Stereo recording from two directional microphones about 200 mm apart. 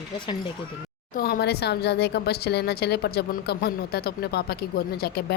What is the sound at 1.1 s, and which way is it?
Speech, 50° left (ahead or behind).